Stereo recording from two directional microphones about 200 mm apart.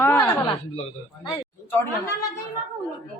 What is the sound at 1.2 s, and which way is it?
Speech, 20° left (ahead or behind).